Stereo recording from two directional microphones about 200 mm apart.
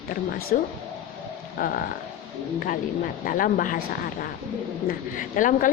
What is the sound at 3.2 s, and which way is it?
Speech, 45° left (ahead or behind).